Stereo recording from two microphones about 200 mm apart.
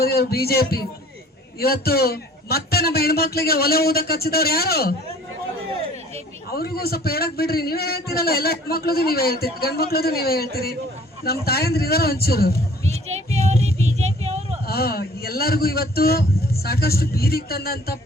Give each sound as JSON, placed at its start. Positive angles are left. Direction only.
{"t": 0.0, "sound": "a man's voice", "side_deg": 50}
{"t": 6.5, "sound": "a man's voice", "side_deg": 50}
{"t": 13.1, "sound": "a sound", "side_deg": -35}
{"t": 14.7, "sound": "a man's voice", "side_deg": 50}